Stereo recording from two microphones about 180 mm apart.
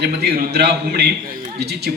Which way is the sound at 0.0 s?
60° right (ahead or behind).